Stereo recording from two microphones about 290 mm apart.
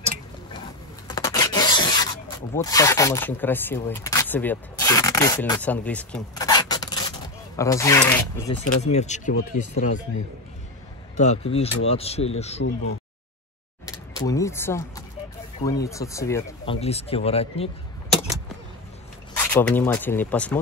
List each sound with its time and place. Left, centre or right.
1.0 s rub: centre
2.5 s speech: centre
8.8 s speech: left
11.1 s speech: left
13.8 s a sound: centre
15.6 s speech: centre
19.5 s speech: centre